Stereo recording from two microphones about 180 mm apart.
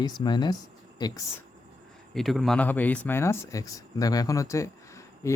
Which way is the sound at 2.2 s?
Centre (ahead or behind).